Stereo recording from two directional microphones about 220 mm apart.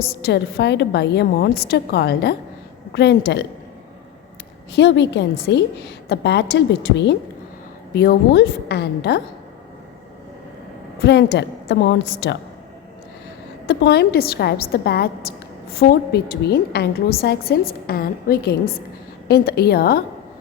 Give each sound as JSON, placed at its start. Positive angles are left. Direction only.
{"t": 0.0, "sound": "a woman's voice", "side_deg": 50}
{"t": 4.7, "sound": "a woman's voice", "side_deg": 50}
{"t": 11.0, "sound": "a woman's voice", "side_deg": 50}
{"t": 13.7, "sound": "a woman's voice", "side_deg": 50}